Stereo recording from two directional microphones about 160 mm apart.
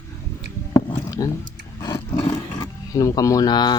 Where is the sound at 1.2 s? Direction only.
25° left (ahead or behind).